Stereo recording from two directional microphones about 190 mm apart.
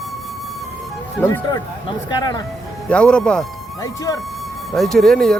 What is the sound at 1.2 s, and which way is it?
Speech, 15° left (ahead or behind).